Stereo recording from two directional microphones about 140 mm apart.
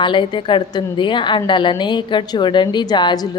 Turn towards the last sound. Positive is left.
turn(degrees=30)  # may be behind; listen again after turning